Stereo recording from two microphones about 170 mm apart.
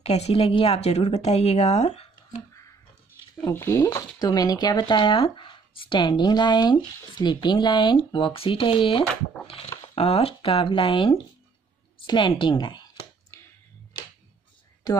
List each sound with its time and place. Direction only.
0.0 s speech: 40° left (ahead or behind)
3.4 s speech: 15° left (ahead or behind)
13.3 s a sound: 15° left (ahead or behind)